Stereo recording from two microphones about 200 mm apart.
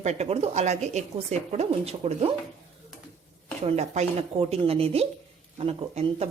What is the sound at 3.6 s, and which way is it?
Speech, 30° right (ahead or behind).